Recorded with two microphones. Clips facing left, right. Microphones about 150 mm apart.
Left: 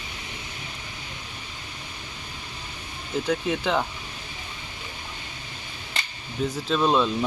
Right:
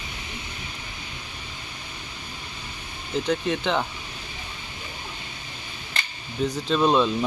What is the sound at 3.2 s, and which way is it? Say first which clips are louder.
Speech: even; 5° left (ahead or behind).